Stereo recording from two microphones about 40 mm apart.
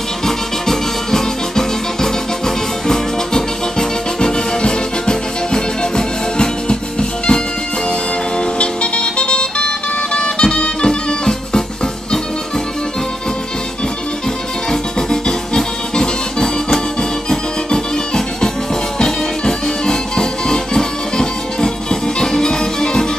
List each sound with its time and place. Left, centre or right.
0.2 s music: centre
14.7 s music: centre